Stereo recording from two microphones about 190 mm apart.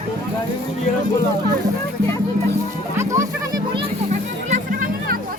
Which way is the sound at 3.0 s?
15° right (ahead or behind).